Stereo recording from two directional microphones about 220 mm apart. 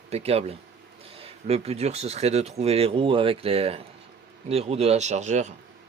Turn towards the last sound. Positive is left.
turn(degrees=-30)  # may be behind; listen again after turning